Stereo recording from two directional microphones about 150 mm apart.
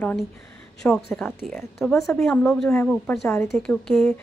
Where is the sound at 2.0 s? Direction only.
20° left (ahead or behind); by 4.1 s 5° left (ahead or behind).